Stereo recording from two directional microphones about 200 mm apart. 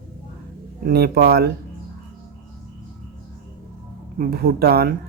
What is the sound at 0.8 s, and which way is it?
Speech, 50° right (ahead or behind).